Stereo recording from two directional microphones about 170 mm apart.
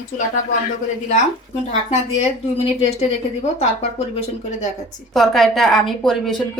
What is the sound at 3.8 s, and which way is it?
Speech, 40° left (ahead or behind).